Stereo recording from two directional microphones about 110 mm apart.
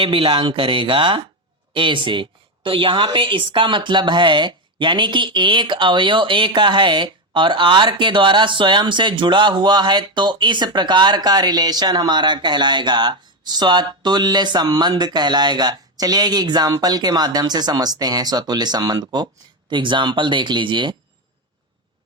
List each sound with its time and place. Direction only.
0.0 s a woman's voice: 55° right (ahead or behind)